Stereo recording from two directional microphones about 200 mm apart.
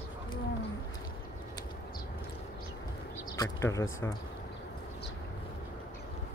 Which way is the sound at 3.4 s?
15° left (ahead or behind).